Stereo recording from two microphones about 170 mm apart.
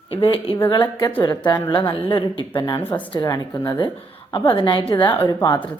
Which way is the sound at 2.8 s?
10° left (ahead or behind).